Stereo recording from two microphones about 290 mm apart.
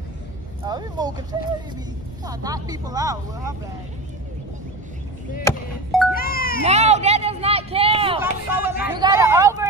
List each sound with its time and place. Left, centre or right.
0.7 s speech: centre
2.2 s speech: centre
5.4 s speech: centre
6.1 s music: left
6.6 s speech: right
8.2 s speech: centre